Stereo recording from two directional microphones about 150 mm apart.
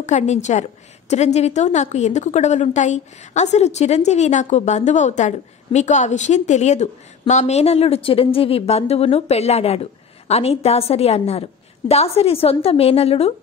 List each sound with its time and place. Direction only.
0.0 s a woman's voice: 50° left (ahead or behind)